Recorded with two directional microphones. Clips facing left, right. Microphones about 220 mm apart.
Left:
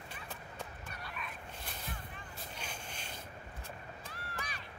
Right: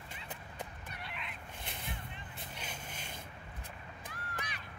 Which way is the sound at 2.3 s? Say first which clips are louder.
Left 1 dB; 45° right (ahead or behind).